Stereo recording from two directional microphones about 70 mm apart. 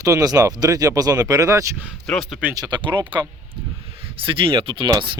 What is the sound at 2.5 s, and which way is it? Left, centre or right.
Speech, right.